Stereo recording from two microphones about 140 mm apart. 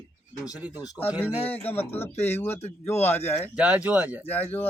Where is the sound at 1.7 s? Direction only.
15° left (ahead or behind).